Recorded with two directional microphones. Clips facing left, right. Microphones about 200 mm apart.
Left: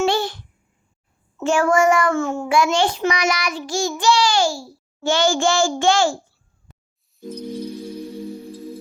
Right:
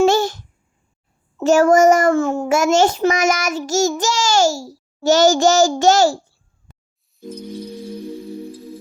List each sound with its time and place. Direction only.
0.0 s a sound: 45° right (ahead or behind)
1.4 s a child's voice: 40° right (ahead or behind)
7.2 s music: centre (ahead or behind)